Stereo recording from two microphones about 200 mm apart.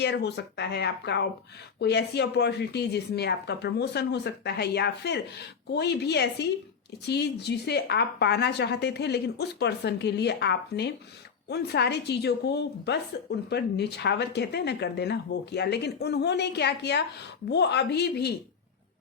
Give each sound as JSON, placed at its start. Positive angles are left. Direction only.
{"t": 0.0, "sound": "speech", "side_deg": 55}